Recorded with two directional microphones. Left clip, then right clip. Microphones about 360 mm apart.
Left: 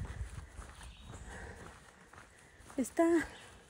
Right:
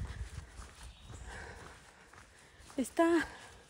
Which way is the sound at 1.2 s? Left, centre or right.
Centre.